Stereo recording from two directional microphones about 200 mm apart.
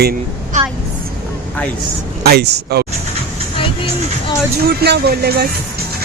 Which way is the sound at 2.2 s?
55° right (ahead or behind).